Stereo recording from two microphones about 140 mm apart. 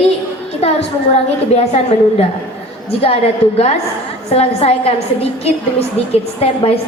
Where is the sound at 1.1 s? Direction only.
45° left (ahead or behind).